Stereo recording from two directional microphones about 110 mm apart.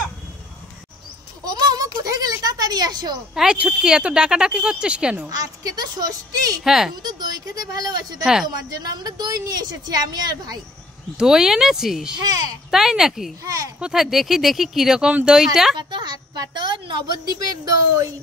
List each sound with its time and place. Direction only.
1.4 s a sound: 35° right (ahead or behind)
3.3 s speech: 10° right (ahead or behind)
5.3 s a woman's voice: 35° right (ahead or behind)
6.6 s speech: 5° right (ahead or behind)
7.0 s a woman's voice: 40° right (ahead or behind)
8.2 s speech: 5° right (ahead or behind)
8.6 s a woman's voice: 35° right (ahead or behind)
11.1 s speech: 5° right (ahead or behind)
12.2 s a woman's voice: 35° right (ahead or behind)
12.7 s speech: 5° right (ahead or behind)
13.4 s a woman's voice: 30° right (ahead or behind)
13.7 s speech: 5° right (ahead or behind)
15.8 s speech: 40° right (ahead or behind)